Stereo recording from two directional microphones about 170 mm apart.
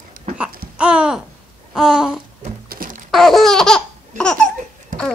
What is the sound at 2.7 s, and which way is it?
Music, 55° right (ahead or behind).